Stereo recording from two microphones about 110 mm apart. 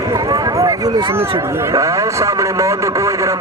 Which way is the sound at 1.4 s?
25° right (ahead or behind).